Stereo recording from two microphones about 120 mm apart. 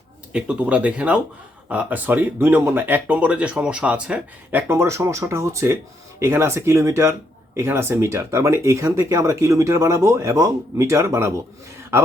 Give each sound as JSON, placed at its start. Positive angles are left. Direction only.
{"t": 0.3, "sound": "speech", "side_deg": -10}
{"t": 4.7, "sound": "speech", "side_deg": -25}
{"t": 11.8, "sound": "a sound", "side_deg": -20}